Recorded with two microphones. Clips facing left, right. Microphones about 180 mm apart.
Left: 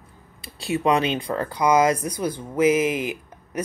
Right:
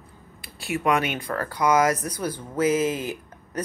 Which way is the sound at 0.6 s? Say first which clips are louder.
Left 3 dB; 25° left (ahead or behind).